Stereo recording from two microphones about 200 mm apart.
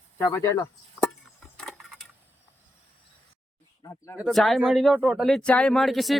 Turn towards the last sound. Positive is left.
turn(degrees=0)  # may be behind; listen again after turning